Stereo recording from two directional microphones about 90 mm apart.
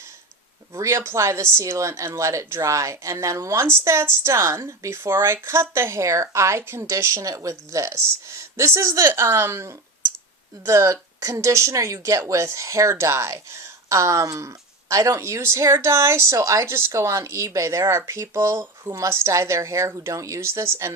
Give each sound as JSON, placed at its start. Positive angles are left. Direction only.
{"t": 0.7, "sound": "speech", "side_deg": -30}